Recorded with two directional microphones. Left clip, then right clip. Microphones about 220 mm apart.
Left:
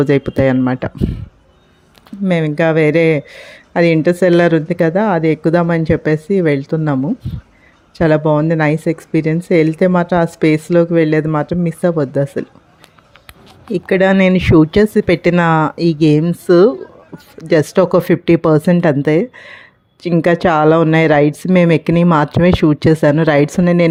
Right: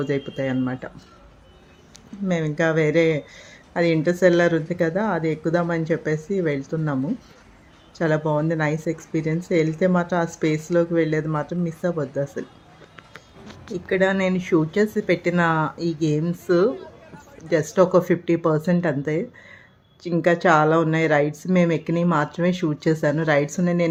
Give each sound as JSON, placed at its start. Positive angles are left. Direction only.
{"t": 0.0, "sound": "speech", "side_deg": 45}
{"t": 2.2, "sound": "speech", "side_deg": 35}
{"t": 13.7, "sound": "speech", "side_deg": 40}